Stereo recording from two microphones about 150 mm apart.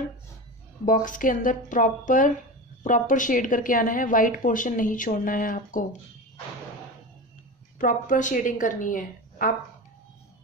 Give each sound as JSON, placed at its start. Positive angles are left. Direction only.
{"t": 0.8, "sound": "a woman's voice", "side_deg": 60}
{"t": 7.8, "sound": "a woman's voice", "side_deg": 60}